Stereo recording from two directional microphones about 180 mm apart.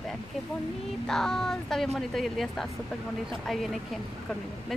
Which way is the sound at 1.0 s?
5° left (ahead or behind).